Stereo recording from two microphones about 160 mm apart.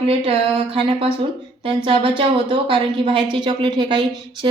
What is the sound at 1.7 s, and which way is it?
A woman's voice, 35° right (ahead or behind).